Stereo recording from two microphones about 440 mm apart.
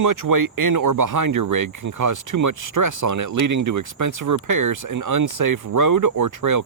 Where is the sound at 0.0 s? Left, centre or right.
Right.